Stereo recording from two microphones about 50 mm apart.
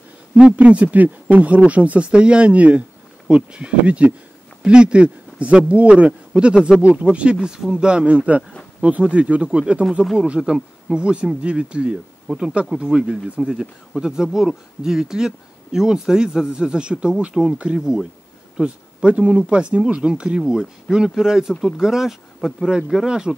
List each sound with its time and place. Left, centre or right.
0.3 s speech: right
7.3 s speech: centre